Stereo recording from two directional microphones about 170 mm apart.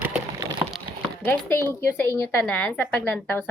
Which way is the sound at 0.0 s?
20° right (ahead or behind).